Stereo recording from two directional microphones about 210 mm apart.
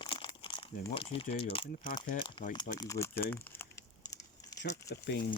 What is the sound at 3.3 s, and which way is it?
Crumpling, 10° left (ahead or behind).